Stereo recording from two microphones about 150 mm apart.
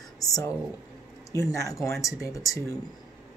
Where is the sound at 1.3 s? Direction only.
20° left (ahead or behind).